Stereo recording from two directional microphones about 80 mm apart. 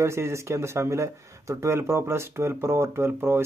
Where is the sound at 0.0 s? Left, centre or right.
Right.